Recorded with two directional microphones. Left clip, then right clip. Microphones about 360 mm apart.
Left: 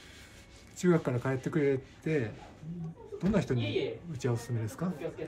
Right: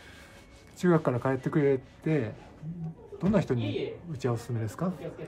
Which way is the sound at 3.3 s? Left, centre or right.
Centre.